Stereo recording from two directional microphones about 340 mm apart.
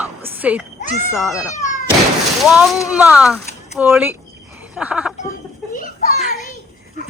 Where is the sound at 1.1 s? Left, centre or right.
Centre.